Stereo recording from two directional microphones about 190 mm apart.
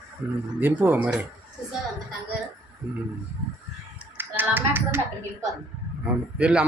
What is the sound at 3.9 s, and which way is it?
Speech, 10° right (ahead or behind).